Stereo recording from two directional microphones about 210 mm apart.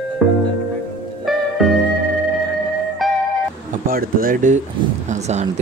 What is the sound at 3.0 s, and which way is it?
Music, centre (ahead or behind).